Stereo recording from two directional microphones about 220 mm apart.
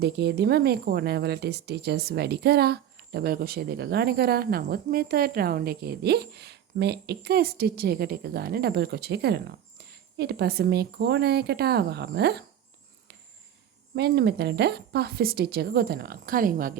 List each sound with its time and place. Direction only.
0.0 s speech: 50° right (ahead or behind)
13.9 s speech: 50° right (ahead or behind)